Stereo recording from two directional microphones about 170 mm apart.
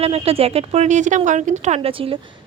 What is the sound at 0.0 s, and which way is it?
Speech, 35° right (ahead or behind).